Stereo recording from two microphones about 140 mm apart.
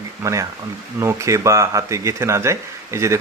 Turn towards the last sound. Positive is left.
turn(degrees=-20)  # may be behind; listen again after turning